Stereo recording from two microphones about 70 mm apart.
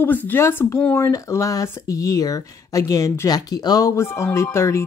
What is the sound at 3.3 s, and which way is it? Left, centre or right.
Speech, left.